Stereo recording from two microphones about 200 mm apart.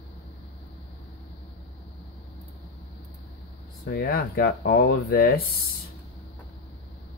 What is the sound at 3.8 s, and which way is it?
Speech, 50° left (ahead or behind).